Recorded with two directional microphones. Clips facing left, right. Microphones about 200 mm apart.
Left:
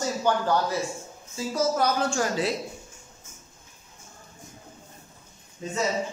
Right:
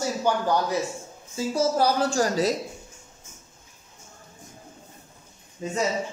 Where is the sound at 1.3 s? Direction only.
30° right (ahead or behind).